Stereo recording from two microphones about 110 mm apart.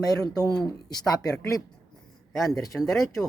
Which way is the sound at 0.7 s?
35° left (ahead or behind).